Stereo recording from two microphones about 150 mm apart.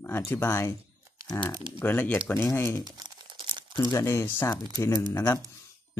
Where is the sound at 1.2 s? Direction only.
30° left (ahead or behind).